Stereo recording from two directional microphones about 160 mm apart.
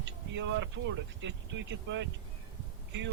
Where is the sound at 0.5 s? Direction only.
90° right.